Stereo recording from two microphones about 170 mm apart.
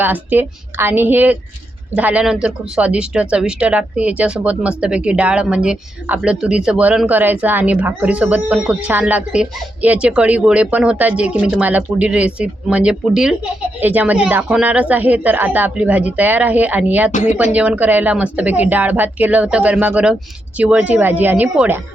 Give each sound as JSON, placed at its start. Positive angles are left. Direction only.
{"t": 0.0, "sound": "speech", "side_deg": -10}
{"t": 17.1, "sound": "speech", "side_deg": 45}
{"t": 17.3, "sound": "speech", "side_deg": -10}